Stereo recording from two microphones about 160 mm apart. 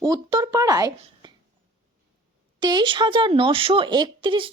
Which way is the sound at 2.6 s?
30° right (ahead or behind).